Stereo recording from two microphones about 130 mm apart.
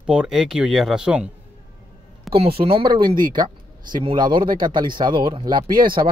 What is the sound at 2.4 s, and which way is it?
Speech, 45° right (ahead or behind).